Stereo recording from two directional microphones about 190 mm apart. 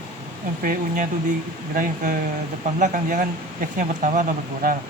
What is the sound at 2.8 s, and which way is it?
Speech, 40° right (ahead or behind).